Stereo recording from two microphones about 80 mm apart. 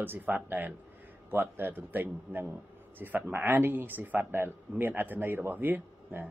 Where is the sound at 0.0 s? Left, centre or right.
Right.